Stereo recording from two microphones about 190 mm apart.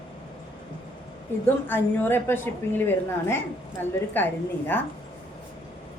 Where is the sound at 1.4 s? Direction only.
10° left (ahead or behind).